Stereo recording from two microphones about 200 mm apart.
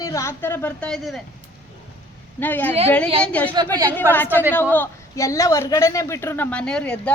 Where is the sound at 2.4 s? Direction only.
10° left (ahead or behind).